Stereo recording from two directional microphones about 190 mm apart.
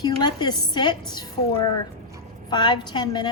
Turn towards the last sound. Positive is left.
turn(degrees=20)  # may be behind; listen again after turning